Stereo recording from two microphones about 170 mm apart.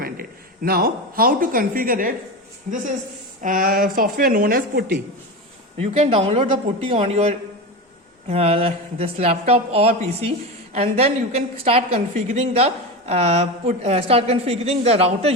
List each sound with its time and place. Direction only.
0.0 s a woman's voice: 60° right (ahead or behind)
5.7 s speech: 35° right (ahead or behind)